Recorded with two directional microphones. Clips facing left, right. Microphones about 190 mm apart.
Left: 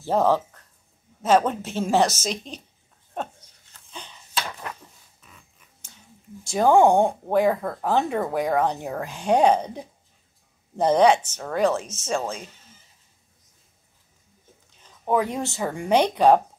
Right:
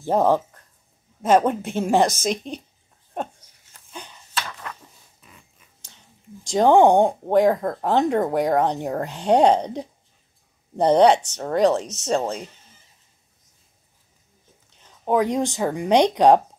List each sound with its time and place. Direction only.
0.0 s speech: 15° right (ahead or behind)
6.4 s speech: 20° right (ahead or behind)
9.2 s speech: 70° right (ahead or behind)
9.5 s speech: 15° right (ahead or behind)
11.0 s speech: 65° right (ahead or behind)
11.3 s speech: 20° right (ahead or behind)
11.8 s speech: 70° right (ahead or behind)
12.1 s speech: 20° right (ahead or behind)
15.0 s speech: 15° right (ahead or behind)